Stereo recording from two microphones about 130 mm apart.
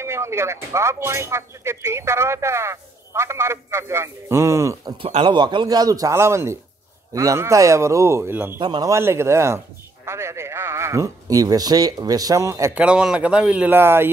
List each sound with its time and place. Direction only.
0.0 s speech: 20° right (ahead or behind)
5.2 s speech: 35° right (ahead or behind); by 8.5 s 15° right (ahead or behind)
8.5 s speech: 30° right (ahead or behind)
12.7 s speech: 10° right (ahead or behind)